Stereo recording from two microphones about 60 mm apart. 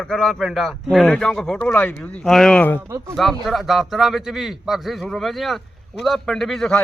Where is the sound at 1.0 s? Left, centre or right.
Centre.